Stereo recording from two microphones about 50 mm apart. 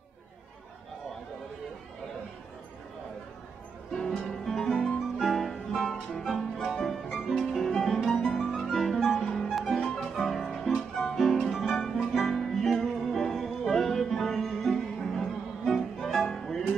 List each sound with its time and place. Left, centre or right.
3.9 s music: centre
11.5 s music: centre